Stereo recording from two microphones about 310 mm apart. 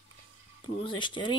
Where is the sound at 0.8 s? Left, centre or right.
Centre.